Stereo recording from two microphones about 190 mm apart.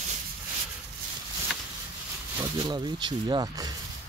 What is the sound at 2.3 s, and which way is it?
Speech, 20° right (ahead or behind).